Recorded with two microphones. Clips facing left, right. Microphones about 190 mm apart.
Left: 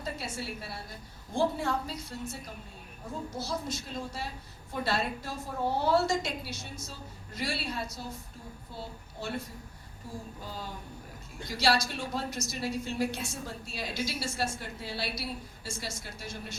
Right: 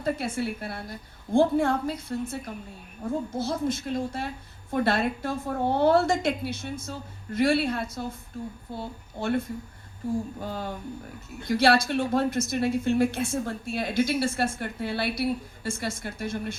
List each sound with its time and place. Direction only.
0.0 s a woman's voice: 55° right (ahead or behind)